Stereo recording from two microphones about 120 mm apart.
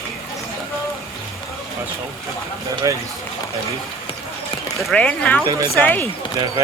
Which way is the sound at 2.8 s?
30° right (ahead or behind).